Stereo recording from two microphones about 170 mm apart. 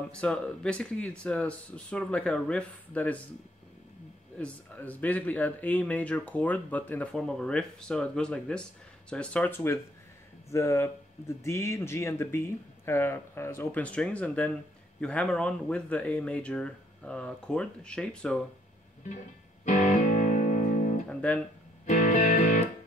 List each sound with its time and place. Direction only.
0.2 s speech: 5° left (ahead or behind)
4.4 s speech: 10° left (ahead or behind)
19.6 s music: 45° left (ahead or behind)
21.1 s speech: 5° left (ahead or behind)
21.8 s music: 45° left (ahead or behind)